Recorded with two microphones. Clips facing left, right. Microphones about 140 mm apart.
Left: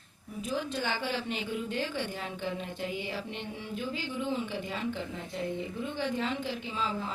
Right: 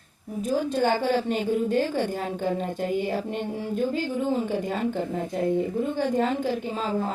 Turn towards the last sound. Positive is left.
turn(degrees=-45)  # may be behind; listen again after turning